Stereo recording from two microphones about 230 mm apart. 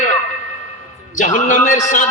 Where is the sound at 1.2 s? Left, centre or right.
Left.